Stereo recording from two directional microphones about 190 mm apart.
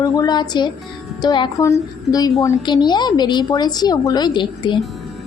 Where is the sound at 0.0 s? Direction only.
20° left (ahead or behind).